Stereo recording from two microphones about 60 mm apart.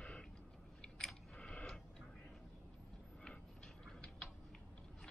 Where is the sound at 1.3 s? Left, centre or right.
Centre.